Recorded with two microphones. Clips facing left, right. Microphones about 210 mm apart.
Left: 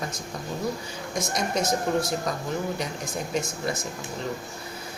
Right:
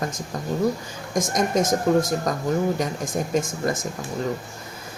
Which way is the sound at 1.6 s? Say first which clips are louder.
Right 5 dB; 90° right.